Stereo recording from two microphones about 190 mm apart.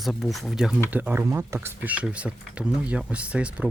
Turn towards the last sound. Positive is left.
turn(degrees=-5)  # may be behind; listen again after turning